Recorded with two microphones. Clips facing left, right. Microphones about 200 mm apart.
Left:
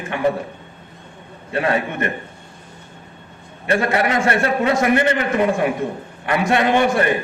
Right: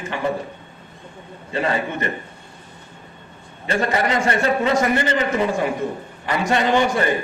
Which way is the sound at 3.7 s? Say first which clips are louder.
Left 2 dB; 55° left (ahead or behind).